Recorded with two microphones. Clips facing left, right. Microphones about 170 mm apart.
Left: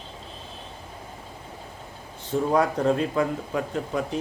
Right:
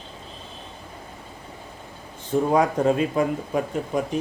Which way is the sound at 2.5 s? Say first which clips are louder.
Right 1 dB; 15° right (ahead or behind).